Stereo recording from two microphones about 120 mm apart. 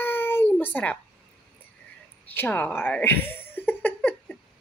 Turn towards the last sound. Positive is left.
turn(degrees=10)  # may be behind; listen again after turning